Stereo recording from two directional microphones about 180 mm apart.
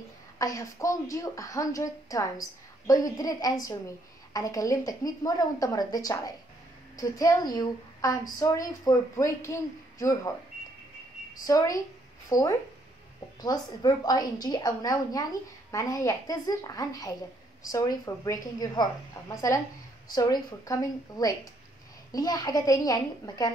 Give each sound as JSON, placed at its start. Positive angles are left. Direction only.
{"t": 0.4, "sound": "a woman's voice", "side_deg": 20}
{"t": 11.4, "sound": "a woman's voice", "side_deg": 20}